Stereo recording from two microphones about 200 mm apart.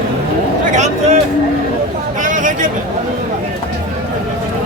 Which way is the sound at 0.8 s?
35° right (ahead or behind).